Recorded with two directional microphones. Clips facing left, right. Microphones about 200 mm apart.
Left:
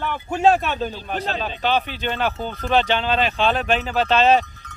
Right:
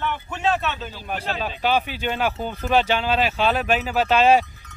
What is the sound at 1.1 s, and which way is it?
Speech, 10° right (ahead or behind).